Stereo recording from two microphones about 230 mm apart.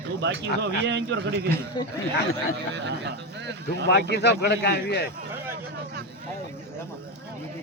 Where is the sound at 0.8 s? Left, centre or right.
Right.